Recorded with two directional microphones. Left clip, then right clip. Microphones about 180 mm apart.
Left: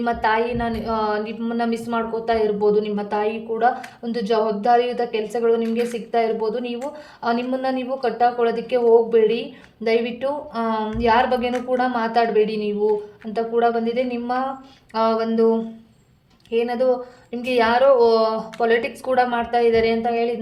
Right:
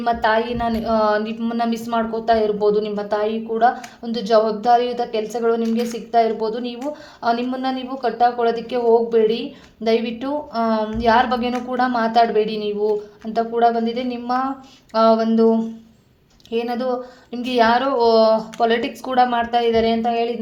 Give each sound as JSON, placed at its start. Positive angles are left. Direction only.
{"t": 0.0, "sound": "a woman's voice", "side_deg": -30}